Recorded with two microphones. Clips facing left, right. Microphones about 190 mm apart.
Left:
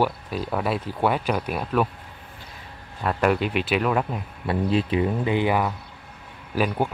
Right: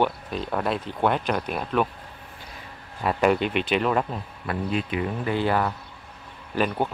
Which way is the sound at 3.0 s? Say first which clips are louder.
Right 1 dB; centre (ahead or behind).